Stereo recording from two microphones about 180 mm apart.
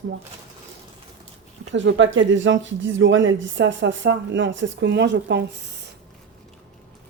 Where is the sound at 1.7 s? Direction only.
90° right; by 5.8 s 70° right (ahead or behind).